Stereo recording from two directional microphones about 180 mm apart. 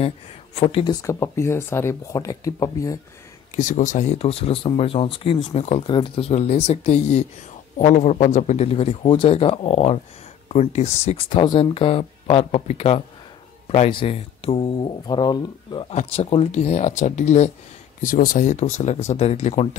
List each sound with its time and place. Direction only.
0.6 s speech: 30° left (ahead or behind)
1.0 s speech: 15° left (ahead or behind)
3.5 s speech: 45° left (ahead or behind); by 15.9 s 25° left (ahead or behind)
15.9 s speech: 35° left (ahead or behind)
18.0 s speech: 50° left (ahead or behind); by 19.8 s 35° left (ahead or behind)